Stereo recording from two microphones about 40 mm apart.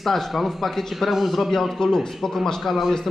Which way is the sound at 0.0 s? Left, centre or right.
Centre.